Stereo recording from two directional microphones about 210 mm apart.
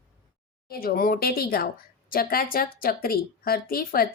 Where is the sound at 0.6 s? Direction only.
45° left (ahead or behind).